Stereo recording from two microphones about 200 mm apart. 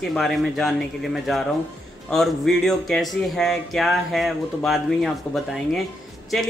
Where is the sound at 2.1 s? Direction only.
Centre (ahead or behind).